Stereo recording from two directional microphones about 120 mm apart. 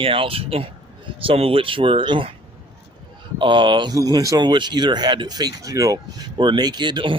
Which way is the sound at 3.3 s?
40° right (ahead or behind).